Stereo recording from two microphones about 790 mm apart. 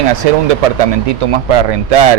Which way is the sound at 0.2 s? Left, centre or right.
Right.